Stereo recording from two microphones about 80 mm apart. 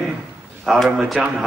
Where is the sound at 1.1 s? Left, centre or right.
Centre.